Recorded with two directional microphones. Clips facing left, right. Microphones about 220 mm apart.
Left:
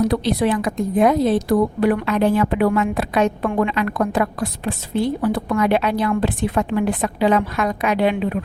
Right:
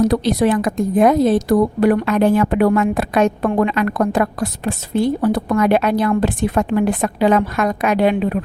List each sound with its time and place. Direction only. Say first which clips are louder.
0.0 s a woman's voice: right 3 dB; 45° right (ahead or behind)